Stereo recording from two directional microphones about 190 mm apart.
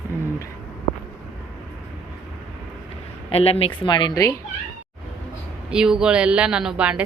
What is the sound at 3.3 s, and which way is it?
A woman's voice, 30° left (ahead or behind).